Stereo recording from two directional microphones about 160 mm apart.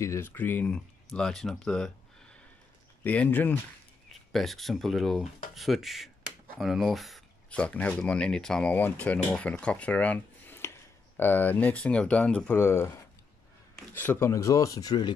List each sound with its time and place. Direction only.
0.0 s speech: 15° left (ahead or behind)
3.0 s speech: 10° left (ahead or behind)
13.9 s speech: 15° left (ahead or behind)